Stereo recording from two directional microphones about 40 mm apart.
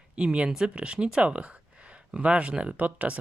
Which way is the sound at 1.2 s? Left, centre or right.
Right.